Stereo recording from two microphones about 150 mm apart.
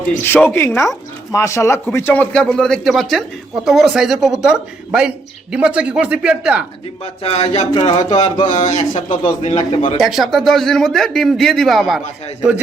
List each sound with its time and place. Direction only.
0.3 s a man's voice: 15° left (ahead or behind); by 6.7 s 5° right (ahead or behind)
7.0 s speech: 40° left (ahead or behind)
7.7 s a sound: 35° left (ahead or behind)
8.4 s a man's voice: 55° left (ahead or behind)
9.6 s a sound: 35° left (ahead or behind)
10.0 s a man's voice: centre (ahead or behind)